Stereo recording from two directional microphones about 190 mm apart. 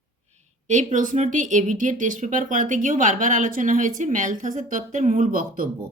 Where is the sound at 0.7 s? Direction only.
40° right (ahead or behind).